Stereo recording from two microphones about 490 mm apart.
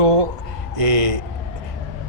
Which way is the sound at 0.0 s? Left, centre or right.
Right.